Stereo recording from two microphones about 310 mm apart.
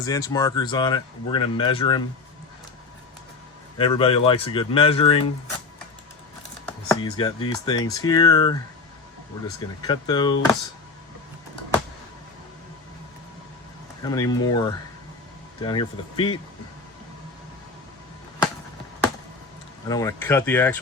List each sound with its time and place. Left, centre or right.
0.0 s speech: centre
3.8 s speech: centre
6.7 s speech: centre
9.6 s speech: centre
14.0 s speech: centre
19.9 s speech: centre